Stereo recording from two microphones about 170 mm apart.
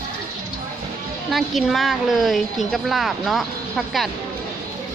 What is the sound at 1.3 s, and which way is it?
A woman's voice, centre (ahead or behind).